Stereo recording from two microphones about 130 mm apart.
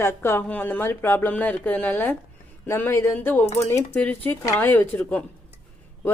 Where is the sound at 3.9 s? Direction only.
10° left (ahead or behind).